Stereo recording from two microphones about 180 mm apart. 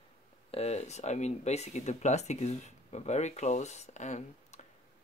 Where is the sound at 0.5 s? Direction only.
35° left (ahead or behind).